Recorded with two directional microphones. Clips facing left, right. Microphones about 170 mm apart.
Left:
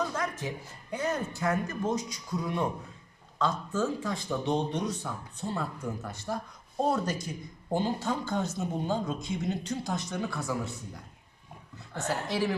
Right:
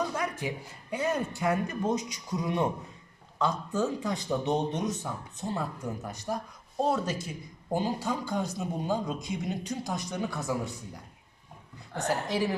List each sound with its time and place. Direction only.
0.1 s speech: 10° right (ahead or behind)
6.7 s speech: centre (ahead or behind)
12.0 s speech: 15° right (ahead or behind)